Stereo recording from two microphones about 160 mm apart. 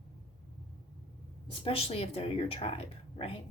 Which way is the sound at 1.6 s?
35° left (ahead or behind).